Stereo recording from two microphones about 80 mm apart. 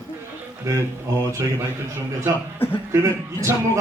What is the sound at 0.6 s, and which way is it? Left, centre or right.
Speech, right.